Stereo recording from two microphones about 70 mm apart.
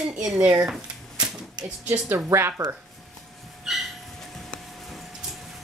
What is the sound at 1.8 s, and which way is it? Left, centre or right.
Speech, right.